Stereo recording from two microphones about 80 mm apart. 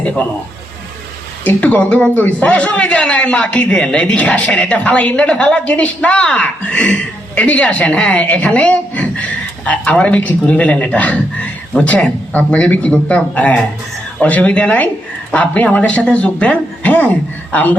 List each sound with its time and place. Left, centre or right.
0.0 s a man's voice: centre
1.5 s a man's voice: centre